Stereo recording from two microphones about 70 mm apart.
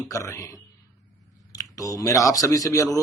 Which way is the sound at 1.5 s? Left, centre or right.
Left.